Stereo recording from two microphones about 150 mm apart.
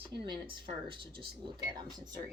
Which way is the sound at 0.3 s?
30° right (ahead or behind).